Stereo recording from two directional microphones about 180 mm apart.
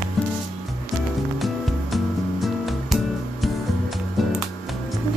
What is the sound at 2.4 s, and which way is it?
Music, centre (ahead or behind).